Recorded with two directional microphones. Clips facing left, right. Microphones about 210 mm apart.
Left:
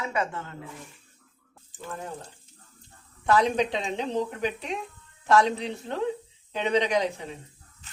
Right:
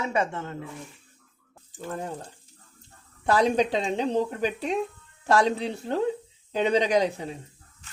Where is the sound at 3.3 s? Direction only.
35° right (ahead or behind).